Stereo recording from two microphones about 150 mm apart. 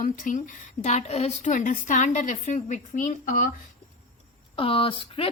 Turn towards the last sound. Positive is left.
turn(degrees=35)  # may be behind; listen again after turning